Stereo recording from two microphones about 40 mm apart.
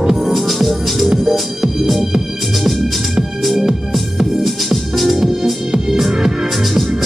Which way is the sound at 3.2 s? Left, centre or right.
Centre.